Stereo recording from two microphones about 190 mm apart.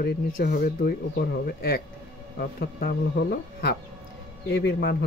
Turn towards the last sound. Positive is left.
turn(degrees=60)  # may be behind; listen again after turning